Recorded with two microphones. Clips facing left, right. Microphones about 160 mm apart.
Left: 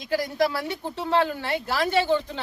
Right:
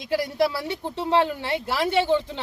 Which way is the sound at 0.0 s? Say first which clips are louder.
Right 1 dB; 25° right (ahead or behind).